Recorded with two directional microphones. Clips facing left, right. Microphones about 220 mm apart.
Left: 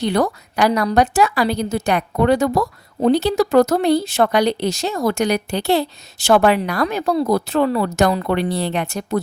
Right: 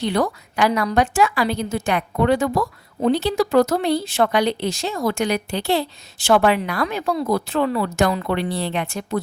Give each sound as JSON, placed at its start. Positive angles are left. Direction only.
{"t": 0.0, "sound": "a woman's voice", "side_deg": 45}